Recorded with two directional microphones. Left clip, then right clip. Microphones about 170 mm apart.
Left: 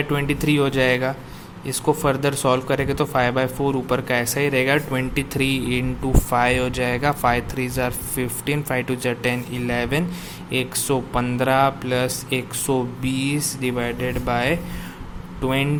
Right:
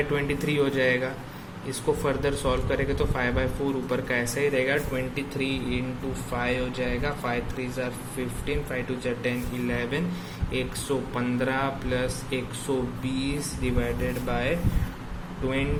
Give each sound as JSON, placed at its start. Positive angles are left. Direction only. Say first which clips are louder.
{"t": 0.1, "sound": "speech", "louder": "left 5 dB", "side_deg": 35}